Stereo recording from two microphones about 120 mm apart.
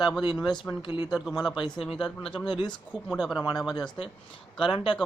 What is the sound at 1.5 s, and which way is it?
Speech, 35° left (ahead or behind).